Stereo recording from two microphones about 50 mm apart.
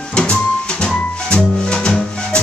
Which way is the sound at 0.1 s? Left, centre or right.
Centre.